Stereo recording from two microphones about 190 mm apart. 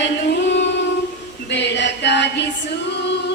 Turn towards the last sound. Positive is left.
turn(degrees=65)  # may be behind; listen again after turning